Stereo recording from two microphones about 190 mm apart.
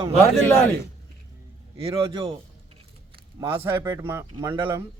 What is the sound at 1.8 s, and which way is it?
Speech, 25° right (ahead or behind).